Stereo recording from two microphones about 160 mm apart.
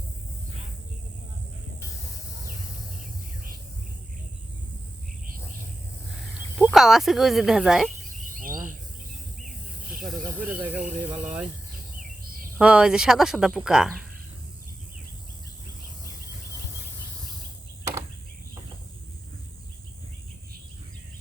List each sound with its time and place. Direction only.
6.6 s speech: 5° right (ahead or behind)
8.3 s bird: 60° right (ahead or behind)
10.0 s speech: 5° right (ahead or behind)
12.5 s speech: 5° right (ahead or behind)